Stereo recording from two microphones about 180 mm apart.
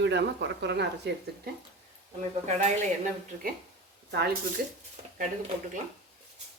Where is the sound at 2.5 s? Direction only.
40° right (ahead or behind).